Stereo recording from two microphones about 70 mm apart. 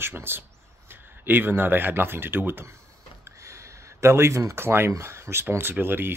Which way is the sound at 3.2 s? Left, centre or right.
Right.